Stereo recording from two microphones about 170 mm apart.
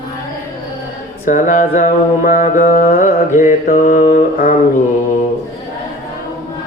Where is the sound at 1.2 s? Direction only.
50° left (ahead or behind).